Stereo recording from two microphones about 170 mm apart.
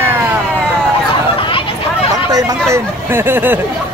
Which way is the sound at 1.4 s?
30° left (ahead or behind).